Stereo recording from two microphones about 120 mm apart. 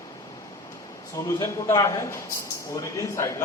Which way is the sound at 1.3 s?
25° left (ahead or behind).